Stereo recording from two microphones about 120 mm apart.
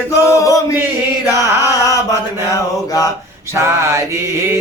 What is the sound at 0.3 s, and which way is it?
Chant, 30° left (ahead or behind).